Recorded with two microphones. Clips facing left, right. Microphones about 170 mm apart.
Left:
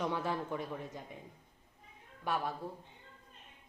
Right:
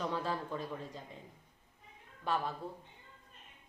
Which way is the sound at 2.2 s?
15° left (ahead or behind).